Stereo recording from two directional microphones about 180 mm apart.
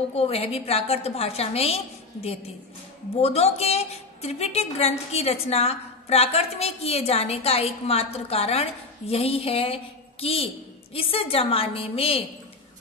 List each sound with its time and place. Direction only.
0.1 s a woman's voice: 35° left (ahead or behind)
3.2 s a woman's voice: 35° left (ahead or behind)